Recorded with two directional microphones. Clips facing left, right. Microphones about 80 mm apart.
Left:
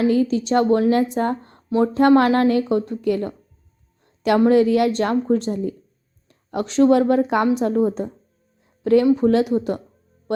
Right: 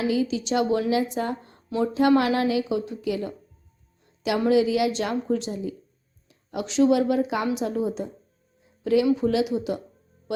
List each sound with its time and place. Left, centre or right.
0.1 s a woman's voice: left
4.4 s a woman's voice: left
8.6 s music: left
9.1 s a woman's voice: left